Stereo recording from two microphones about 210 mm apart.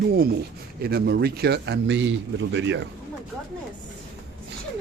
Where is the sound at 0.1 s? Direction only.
45° right (ahead or behind).